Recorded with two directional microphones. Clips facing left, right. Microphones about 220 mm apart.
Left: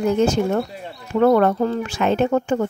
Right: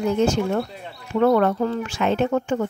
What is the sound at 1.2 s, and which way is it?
Speech, 45° left (ahead or behind).